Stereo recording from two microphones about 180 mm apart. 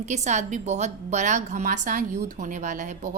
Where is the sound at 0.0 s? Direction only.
40° right (ahead or behind).